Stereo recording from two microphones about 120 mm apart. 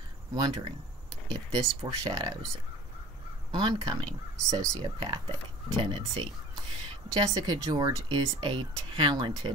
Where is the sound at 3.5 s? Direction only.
40° right (ahead or behind).